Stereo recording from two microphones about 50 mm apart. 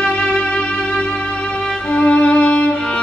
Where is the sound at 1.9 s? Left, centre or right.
Left.